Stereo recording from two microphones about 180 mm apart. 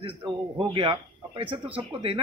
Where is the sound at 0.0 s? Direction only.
25° right (ahead or behind).